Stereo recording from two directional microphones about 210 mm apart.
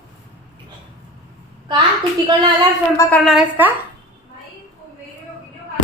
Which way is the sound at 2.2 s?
20° right (ahead or behind).